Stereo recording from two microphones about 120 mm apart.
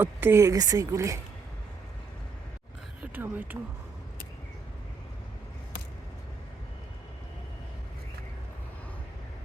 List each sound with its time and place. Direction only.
0.0 s speech: 20° right (ahead or behind)
3.0 s speech: 15° right (ahead or behind)